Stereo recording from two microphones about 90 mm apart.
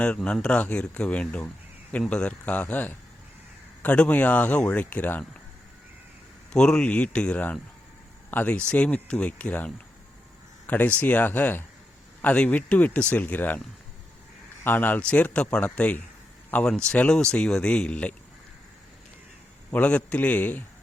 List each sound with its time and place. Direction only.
0.3 s speech: 10° left (ahead or behind)
6.5 s speech: 10° left (ahead or behind)
14.6 s speech: 20° left (ahead or behind)
19.7 s speech: 15° left (ahead or behind)